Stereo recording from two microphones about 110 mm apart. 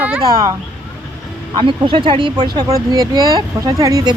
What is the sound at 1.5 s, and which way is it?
Speech, 50° right (ahead or behind).